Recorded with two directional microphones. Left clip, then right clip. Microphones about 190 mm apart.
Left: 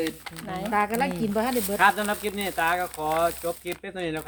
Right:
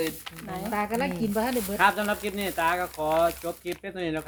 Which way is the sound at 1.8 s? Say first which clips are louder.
Left 1 dB; centre (ahead or behind).